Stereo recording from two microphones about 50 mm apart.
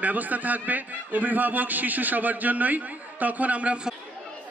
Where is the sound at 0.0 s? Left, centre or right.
Right.